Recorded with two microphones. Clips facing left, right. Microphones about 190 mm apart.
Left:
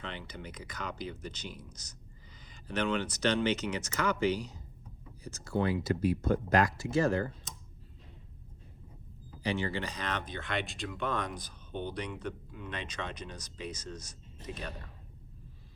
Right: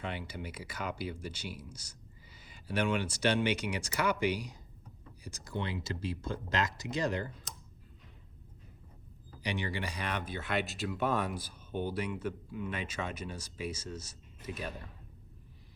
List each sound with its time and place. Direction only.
0.0 s speech: 10° right (ahead or behind)
9.4 s speech: 15° right (ahead or behind)